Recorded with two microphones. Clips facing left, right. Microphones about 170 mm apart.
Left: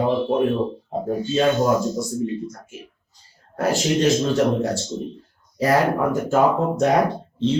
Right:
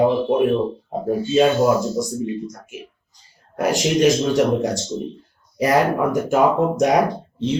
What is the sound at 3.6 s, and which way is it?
Speech, 15° right (ahead or behind).